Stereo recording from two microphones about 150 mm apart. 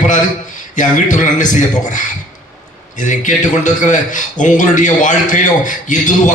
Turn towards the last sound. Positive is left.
turn(degrees=60)  # may be behind; listen again after turning